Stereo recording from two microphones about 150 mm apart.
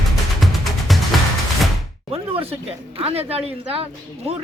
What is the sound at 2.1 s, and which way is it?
Music, 40° right (ahead or behind).